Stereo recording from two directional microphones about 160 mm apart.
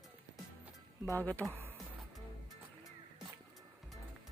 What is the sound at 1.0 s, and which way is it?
Speech, 10° left (ahead or behind).